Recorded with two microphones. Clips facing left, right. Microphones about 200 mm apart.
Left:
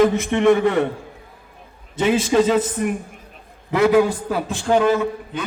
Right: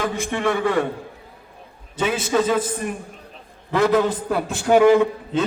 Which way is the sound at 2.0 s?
25° left (ahead or behind).